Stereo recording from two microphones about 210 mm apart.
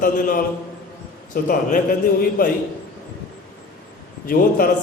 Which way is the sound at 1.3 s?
40° left (ahead or behind).